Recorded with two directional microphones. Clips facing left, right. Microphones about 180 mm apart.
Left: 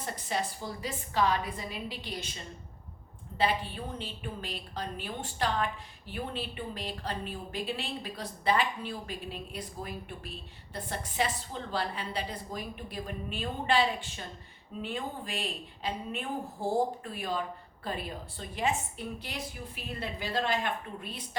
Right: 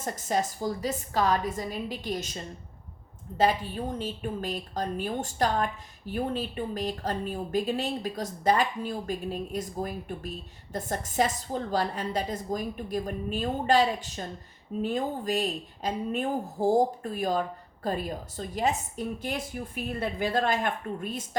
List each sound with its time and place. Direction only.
0.0 s a woman's voice: 45° right (ahead or behind)